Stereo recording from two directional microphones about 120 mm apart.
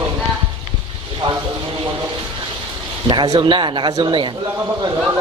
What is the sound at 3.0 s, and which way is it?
Speech, 35° right (ahead or behind).